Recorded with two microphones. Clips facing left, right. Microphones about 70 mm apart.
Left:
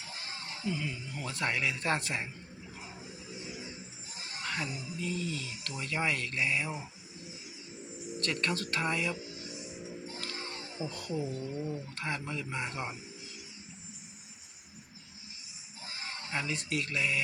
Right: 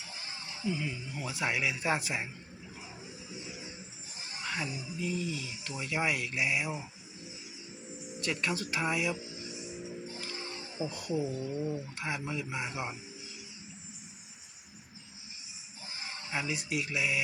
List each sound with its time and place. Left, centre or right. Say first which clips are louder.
0.1 s music: left 3 dB; left
0.6 s speech: right 1 dB; centre
4.4 s speech: even; centre
8.2 s speech: even; centre
9.3 s music: right 1 dB; left
10.3 s a sound: even; left
10.8 s speech: right 3 dB; centre
16.3 s speech: even; centre